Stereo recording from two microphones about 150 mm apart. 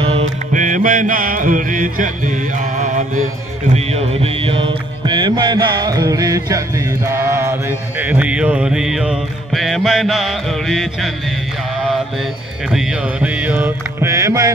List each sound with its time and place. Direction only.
0.0 s mantra: 40° right (ahead or behind)
0.5 s music: 60° right (ahead or behind)
3.7 s music: 40° right (ahead or behind); by 6.6 s 25° right (ahead or behind)
7.1 s mantra: 20° right (ahead or behind)
8.0 s music: 10° right (ahead or behind)
12.7 s music: 10° right (ahead or behind)